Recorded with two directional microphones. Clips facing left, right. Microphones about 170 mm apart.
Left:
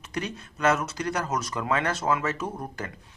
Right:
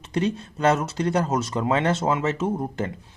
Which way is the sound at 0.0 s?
30° right (ahead or behind).